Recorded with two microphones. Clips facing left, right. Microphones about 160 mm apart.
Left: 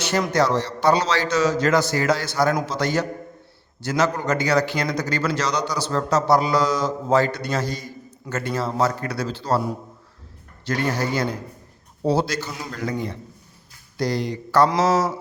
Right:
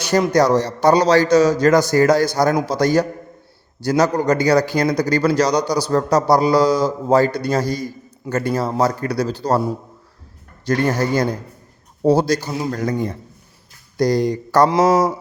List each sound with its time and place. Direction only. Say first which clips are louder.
0.3 s a man's voice: right 4 dB; 40° right (ahead or behind)
7.6 s a man's voice: right 6 dB; 10° right (ahead or behind)
8.3 s a man's voice: right 5 dB; 35° right (ahead or behind)
10.7 s a man's voice: right 5 dB; 45° right (ahead or behind)
14.8 s a sound: right 5 dB; 15° right (ahead or behind)